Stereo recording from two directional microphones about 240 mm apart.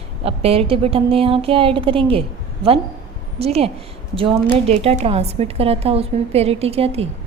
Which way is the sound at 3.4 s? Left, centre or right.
Right.